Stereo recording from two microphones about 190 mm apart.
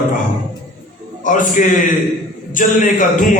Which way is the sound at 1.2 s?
45° left (ahead or behind).